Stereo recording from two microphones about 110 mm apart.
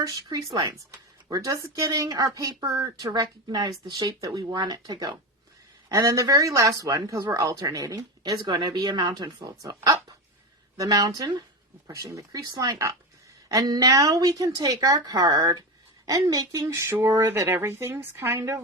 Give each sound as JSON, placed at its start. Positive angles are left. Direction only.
{"t": 0.0, "sound": "speech", "side_deg": -30}